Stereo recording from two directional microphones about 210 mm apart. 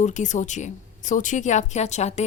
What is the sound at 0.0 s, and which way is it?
A woman's voice, 35° left (ahead or behind).